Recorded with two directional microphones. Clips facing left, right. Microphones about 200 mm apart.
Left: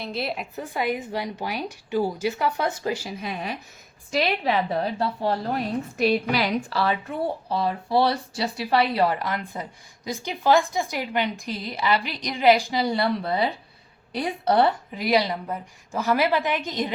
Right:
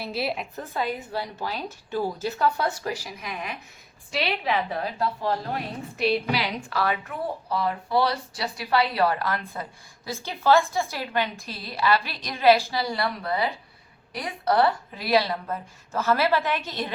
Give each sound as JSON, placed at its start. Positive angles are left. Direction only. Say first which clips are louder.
{"t": 0.0, "sound": "a woman's voice", "louder": "even", "side_deg": -5}
{"t": 0.6, "sound": "a woman's voice", "louder": "left 4 dB", "side_deg": 15}
{"t": 4.1, "sound": "a woman's voice", "louder": "left 4 dB", "side_deg": 40}
{"t": 6.0, "sound": "a woman's voice", "louder": "left 2 dB", "side_deg": 45}
{"t": 6.7, "sound": "a woman's voice", "louder": "left 2 dB", "side_deg": 30}